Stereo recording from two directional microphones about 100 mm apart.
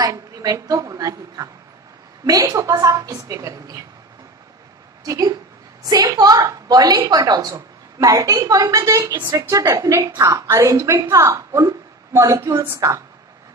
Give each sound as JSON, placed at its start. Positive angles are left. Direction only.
{"t": 0.0, "sound": "a woman's voice", "side_deg": -35}
{"t": 5.0, "sound": "a woman's voice", "side_deg": -35}